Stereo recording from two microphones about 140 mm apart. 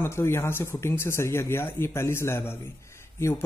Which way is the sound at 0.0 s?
20° left (ahead or behind).